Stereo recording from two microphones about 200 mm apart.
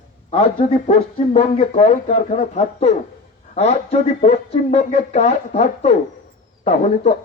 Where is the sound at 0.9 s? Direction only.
30° left (ahead or behind).